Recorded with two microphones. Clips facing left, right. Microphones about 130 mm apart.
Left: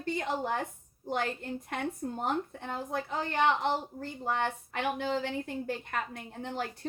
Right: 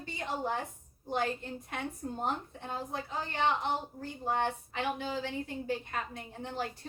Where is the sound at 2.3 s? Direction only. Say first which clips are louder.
Left 5 dB; 60° left (ahead or behind).